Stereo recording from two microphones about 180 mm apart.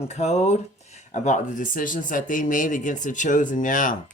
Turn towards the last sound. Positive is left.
turn(degrees=45)  # may be behind; listen again after turning